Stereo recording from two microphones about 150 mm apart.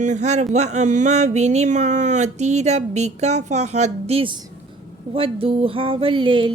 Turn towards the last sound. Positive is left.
turn(degrees=-35)  # may be behind; listen again after turning